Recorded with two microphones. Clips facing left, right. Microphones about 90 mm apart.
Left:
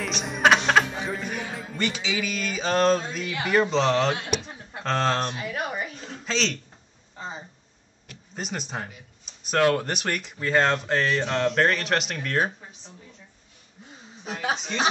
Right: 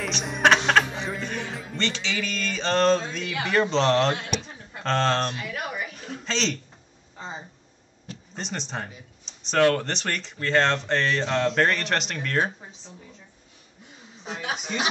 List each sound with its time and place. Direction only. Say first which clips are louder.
0.0 s speech: even; centre (ahead or behind)
5.3 s a sound: left 2 dB; 30° left (ahead or behind)
6.2 s a man's voice: left 1 dB; centre (ahead or behind)
8.4 s speech: left 1 dB; 5° left (ahead or behind)